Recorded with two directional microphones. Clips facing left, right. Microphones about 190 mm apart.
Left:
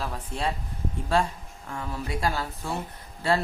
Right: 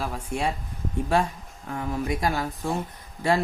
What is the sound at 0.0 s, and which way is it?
Speech, 10° right (ahead or behind).